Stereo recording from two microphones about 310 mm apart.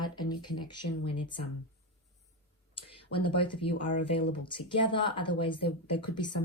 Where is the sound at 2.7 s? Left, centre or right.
Centre.